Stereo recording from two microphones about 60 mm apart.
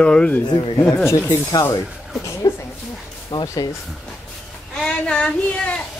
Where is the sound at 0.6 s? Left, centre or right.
Left.